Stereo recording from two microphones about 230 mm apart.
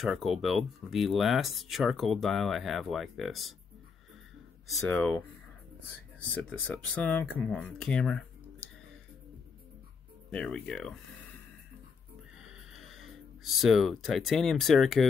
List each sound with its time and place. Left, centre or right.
0.0 s speech: centre
4.7 s speech: centre
6.3 s speech: centre
10.3 s speech: centre
12.4 s a sound: centre